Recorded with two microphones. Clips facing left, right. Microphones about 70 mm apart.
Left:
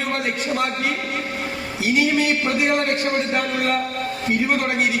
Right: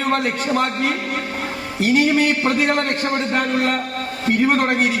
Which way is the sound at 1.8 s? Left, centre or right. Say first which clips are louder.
Right 3 dB; right.